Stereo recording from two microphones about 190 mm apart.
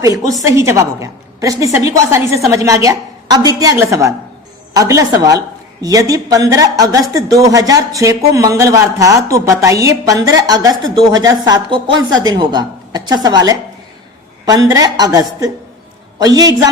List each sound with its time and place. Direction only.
0.0 s a woman's voice: 15° right (ahead or behind)